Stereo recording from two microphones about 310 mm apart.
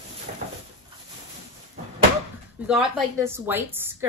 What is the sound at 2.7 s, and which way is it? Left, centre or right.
A woman's voice, centre.